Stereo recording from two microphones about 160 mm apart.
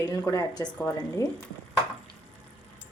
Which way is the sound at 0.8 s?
10° left (ahead or behind).